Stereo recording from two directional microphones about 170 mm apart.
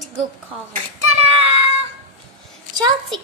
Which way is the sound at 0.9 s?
40° right (ahead or behind).